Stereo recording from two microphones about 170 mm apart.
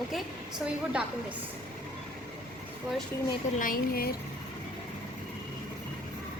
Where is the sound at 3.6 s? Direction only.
55° left (ahead or behind).